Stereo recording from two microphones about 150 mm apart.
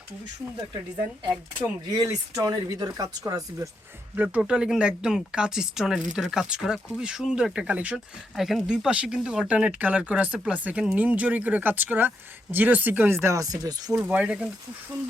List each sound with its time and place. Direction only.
2.0 s speech: 20° right (ahead or behind)
4.1 s speech: 10° right (ahead or behind); by 14.0 s 25° right (ahead or behind)
14.0 s speech: 10° right (ahead or behind)